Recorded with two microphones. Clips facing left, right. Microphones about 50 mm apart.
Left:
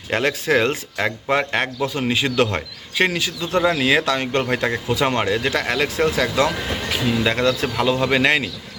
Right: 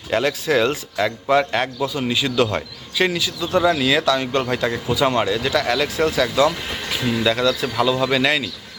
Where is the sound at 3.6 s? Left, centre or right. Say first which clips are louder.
Even; left.